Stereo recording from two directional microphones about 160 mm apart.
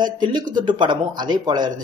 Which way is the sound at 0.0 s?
30° right (ahead or behind).